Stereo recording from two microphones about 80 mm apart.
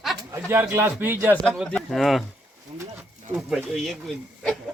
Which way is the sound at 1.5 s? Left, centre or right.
Centre.